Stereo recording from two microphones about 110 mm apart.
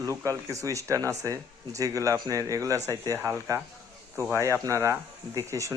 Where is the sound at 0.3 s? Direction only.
30° right (ahead or behind).